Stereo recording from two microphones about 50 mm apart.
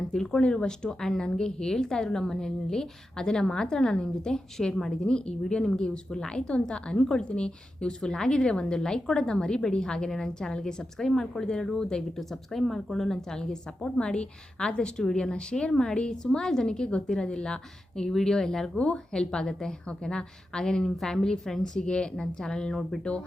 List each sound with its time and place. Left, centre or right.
0.1 s a woman's voice: centre
18.8 s a woman's voice: left